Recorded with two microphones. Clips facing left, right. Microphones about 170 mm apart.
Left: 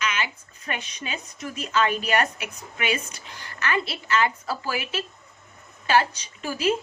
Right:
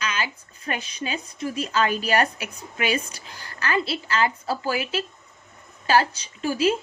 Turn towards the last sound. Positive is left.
turn(degrees=-30)  # may be behind; listen again after turning